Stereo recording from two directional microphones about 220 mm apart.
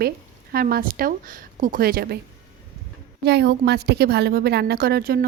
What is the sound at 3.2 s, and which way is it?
A woman's voice, 50° right (ahead or behind).